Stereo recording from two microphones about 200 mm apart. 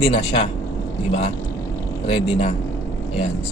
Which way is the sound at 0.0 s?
25° left (ahead or behind).